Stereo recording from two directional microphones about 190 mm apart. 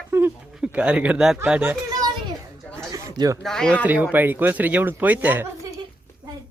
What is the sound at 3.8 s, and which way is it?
Speech, 10° right (ahead or behind).